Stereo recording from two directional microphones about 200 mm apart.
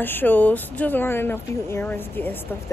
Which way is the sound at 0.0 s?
10° left (ahead or behind).